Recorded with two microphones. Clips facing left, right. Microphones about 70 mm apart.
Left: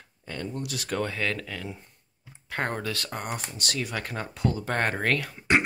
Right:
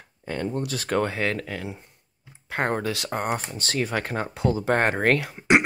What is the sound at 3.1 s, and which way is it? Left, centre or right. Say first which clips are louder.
Speech: right 7 dB; right.